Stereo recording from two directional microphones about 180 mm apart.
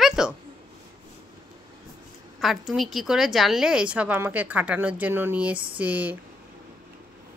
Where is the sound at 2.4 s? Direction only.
Centre (ahead or behind).